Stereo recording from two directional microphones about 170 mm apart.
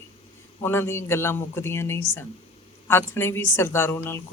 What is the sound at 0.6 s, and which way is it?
A woman's voice, 15° left (ahead or behind).